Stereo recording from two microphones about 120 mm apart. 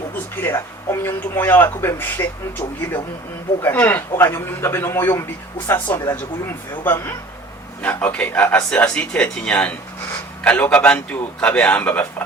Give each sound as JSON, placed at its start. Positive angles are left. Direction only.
{"t": 0.4, "sound": "speech", "side_deg": 20}
{"t": 3.6, "sound": "speech", "side_deg": 15}